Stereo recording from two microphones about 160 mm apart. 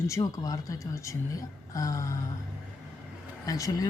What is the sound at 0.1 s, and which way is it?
Speech, 20° left (ahead or behind).